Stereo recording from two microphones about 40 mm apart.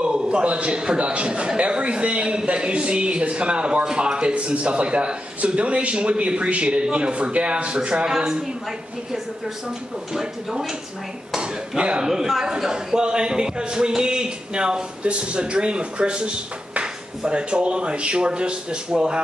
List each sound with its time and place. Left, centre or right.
0.0 s a man's voice: right
11.3 s a man's voice: right
12.0 s a man's voice: centre